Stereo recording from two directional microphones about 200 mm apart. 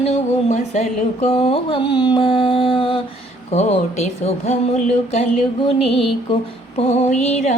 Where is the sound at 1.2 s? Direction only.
30° left (ahead or behind).